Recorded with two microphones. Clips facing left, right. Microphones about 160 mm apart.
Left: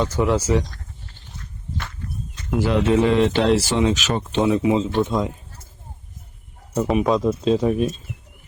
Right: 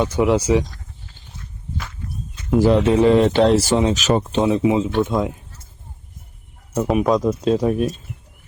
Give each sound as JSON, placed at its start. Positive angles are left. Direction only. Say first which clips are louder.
{"t": 0.0, "sound": "speech", "louder": "right 3 dB", "side_deg": -15}
{"t": 2.6, "sound": "speech", "louder": "right 3 dB", "side_deg": -35}
{"t": 4.9, "sound": "speech", "louder": "right 1 dB", "side_deg": -5}
{"t": 6.7, "sound": "speech", "louder": "right 1 dB", "side_deg": -5}